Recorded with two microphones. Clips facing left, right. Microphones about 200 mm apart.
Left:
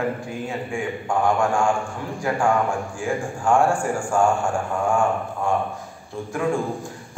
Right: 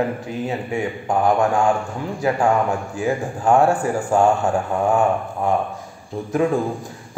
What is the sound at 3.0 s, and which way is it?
Speech, 20° right (ahead or behind).